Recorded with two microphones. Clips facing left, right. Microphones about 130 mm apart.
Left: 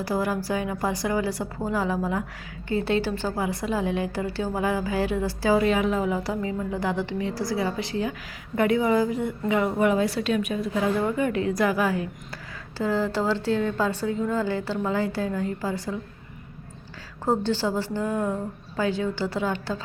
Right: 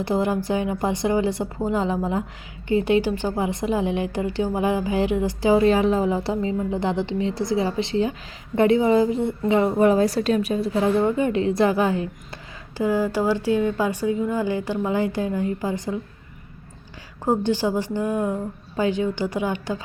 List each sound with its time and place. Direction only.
0.0 s a woman's voice: 20° right (ahead or behind)
5.6 s a woman's voice: 30° right (ahead or behind)
12.7 s speech: 15° right (ahead or behind)
17.2 s speech: 15° right (ahead or behind)